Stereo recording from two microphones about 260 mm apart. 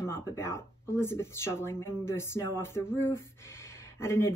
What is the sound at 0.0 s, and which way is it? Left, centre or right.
Speech, centre.